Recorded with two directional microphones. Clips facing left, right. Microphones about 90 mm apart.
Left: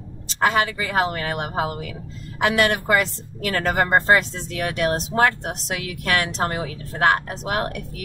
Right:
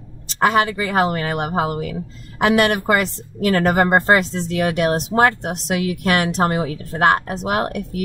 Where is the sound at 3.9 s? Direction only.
15° right (ahead or behind).